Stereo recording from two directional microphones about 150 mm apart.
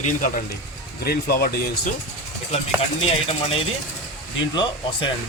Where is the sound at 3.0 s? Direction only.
40° left (ahead or behind).